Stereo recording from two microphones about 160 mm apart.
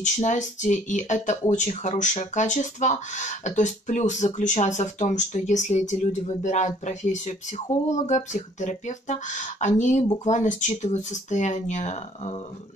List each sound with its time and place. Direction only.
0.0 s speech: 50° left (ahead or behind)